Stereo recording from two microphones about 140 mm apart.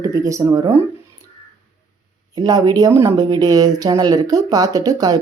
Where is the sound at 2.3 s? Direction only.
30° right (ahead or behind).